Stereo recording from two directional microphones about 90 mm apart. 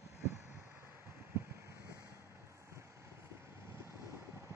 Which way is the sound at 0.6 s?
30° right (ahead or behind).